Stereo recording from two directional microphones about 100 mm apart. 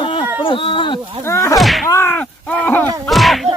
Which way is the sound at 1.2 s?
30° left (ahead or behind).